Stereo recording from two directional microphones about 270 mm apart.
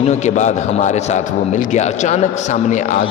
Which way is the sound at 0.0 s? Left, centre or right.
Left.